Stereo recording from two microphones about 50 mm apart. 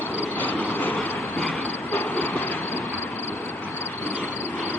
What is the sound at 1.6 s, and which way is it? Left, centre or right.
Vehicle, left.